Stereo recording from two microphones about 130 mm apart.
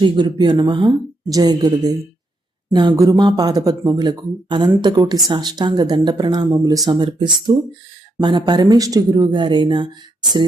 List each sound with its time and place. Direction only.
0.0 s speech: 35° right (ahead or behind)